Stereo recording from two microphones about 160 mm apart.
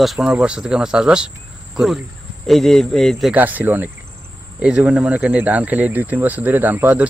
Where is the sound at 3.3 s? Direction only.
10° right (ahead or behind).